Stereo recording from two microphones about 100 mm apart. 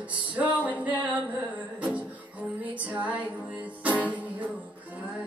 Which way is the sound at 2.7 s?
15° right (ahead or behind).